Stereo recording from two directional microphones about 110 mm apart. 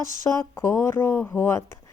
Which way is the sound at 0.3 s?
20° left (ahead or behind).